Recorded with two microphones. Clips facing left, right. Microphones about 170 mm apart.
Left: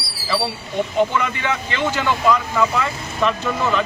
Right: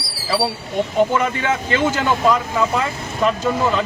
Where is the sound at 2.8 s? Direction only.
35° right (ahead or behind).